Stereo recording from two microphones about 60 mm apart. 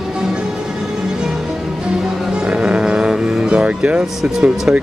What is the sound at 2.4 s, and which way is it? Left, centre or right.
Music, centre.